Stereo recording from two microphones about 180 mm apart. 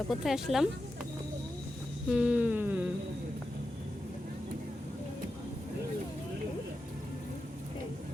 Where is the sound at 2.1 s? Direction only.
5° right (ahead or behind).